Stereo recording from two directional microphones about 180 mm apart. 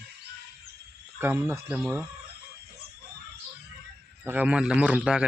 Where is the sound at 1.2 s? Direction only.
15° right (ahead or behind).